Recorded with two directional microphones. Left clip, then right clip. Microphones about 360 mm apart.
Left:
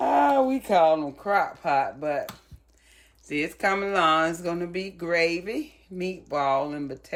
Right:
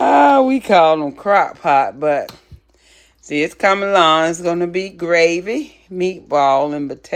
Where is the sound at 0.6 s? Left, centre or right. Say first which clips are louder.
Right 8 dB; right.